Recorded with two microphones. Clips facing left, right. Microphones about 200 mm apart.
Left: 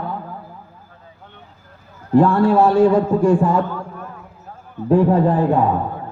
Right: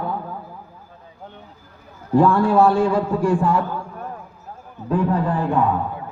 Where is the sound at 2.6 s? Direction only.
20° left (ahead or behind).